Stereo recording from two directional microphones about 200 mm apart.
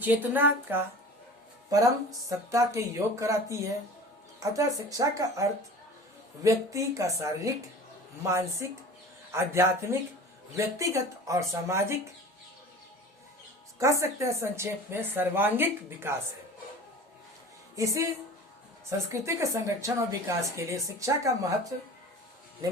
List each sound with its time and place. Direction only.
0.0 s a woman's voice: 10° right (ahead or behind)
13.7 s a woman's voice: 15° right (ahead or behind)
17.7 s a woman's voice: 15° right (ahead or behind)